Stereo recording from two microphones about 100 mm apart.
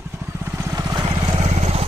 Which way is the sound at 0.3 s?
25° right (ahead or behind).